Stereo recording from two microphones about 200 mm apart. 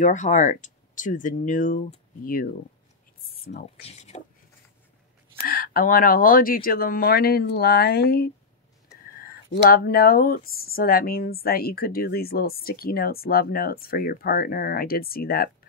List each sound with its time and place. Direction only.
0.0 s speech: 40° left (ahead or behind)
3.4 s speech: 50° left (ahead or behind)
3.8 s speech: 30° left (ahead or behind)
5.4 s speech: 45° left (ahead or behind)